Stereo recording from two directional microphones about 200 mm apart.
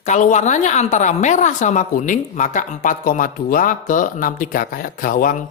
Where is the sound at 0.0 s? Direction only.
35° left (ahead or behind).